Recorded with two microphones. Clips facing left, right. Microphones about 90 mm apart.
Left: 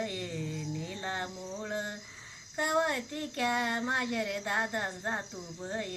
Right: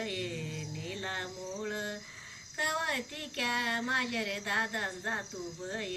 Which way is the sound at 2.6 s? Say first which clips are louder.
Left 4 dB; 15° left (ahead or behind).